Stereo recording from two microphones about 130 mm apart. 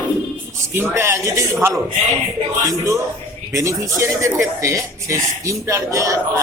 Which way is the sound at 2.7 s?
25° right (ahead or behind).